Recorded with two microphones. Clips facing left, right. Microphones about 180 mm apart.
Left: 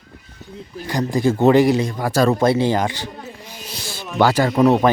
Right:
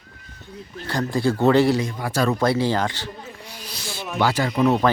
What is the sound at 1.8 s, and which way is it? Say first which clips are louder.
Speech: left 5 dB; 40° left (ahead or behind).